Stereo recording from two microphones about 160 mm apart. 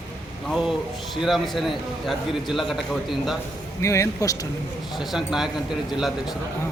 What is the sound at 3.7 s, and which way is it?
Speech, 20° left (ahead or behind).